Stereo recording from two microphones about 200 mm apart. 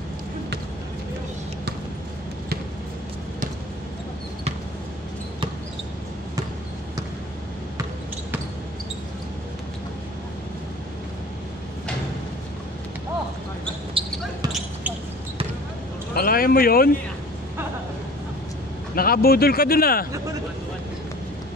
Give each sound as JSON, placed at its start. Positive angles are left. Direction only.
{"t": 14.0, "sound": "basketball bounce", "side_deg": -25}
{"t": 16.2, "sound": "a sound", "side_deg": 45}
{"t": 18.9, "sound": "speech", "side_deg": 50}